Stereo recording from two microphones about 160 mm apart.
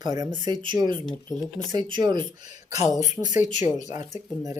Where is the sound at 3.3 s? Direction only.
50° left (ahead or behind).